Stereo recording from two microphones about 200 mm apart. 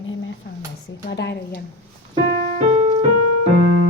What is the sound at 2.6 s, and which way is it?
Music, 35° right (ahead or behind).